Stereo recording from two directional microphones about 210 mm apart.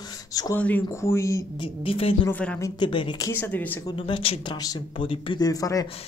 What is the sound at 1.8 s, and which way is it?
Speech, 25° left (ahead or behind).